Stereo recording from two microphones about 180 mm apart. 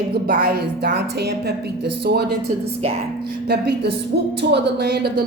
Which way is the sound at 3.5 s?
65° right (ahead or behind).